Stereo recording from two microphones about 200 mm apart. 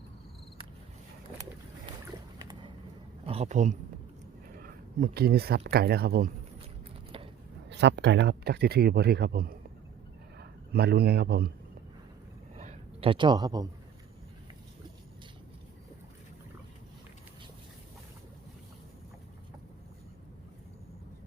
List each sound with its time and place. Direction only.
2.4 s vehicle: 20° right (ahead or behind)
3.2 s speech: 30° right (ahead or behind); by 6.3 s 50° right (ahead or behind)
7.7 s a man's voice: 60° right (ahead or behind)
12.5 s a sound: 30° right (ahead or behind)